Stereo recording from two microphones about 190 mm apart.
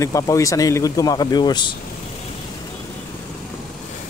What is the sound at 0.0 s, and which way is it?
Speech, 15° left (ahead or behind).